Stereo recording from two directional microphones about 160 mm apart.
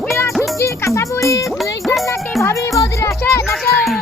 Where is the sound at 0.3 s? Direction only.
Centre (ahead or behind).